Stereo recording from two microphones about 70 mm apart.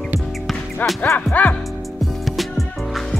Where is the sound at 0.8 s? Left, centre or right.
Left.